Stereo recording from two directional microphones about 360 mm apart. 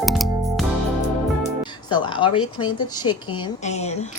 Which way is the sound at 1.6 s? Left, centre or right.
Centre.